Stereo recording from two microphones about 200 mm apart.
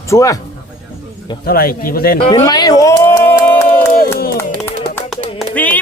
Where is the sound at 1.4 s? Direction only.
50° left (ahead or behind).